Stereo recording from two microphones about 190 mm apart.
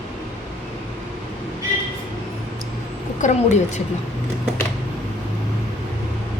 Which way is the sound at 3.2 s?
40° left (ahead or behind).